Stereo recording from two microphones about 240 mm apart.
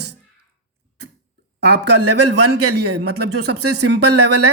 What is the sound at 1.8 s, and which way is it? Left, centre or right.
Speech, right.